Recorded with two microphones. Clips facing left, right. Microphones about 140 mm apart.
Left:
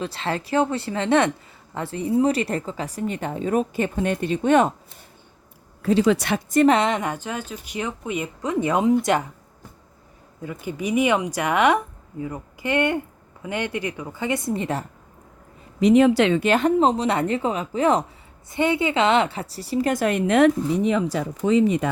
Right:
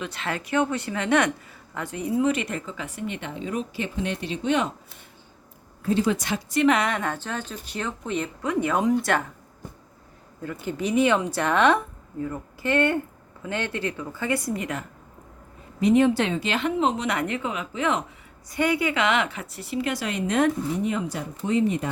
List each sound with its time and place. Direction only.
0.0 s speech: 30° left (ahead or behind); by 4.7 s 50° left (ahead or behind)
5.8 s speech: 90° left; by 6.4 s 65° left (ahead or behind)
6.5 s a woman's voice: 45° left (ahead or behind)
6.7 s a woman's voice: 20° left (ahead or behind)
10.4 s a woman's voice: 15° left (ahead or behind); by 14.8 s 30° left (ahead or behind)
15.8 s speech: 90° left
16.5 s speech: 40° left (ahead or behind)
18.5 s speech: 25° left (ahead or behind); by 21.2 s 90° left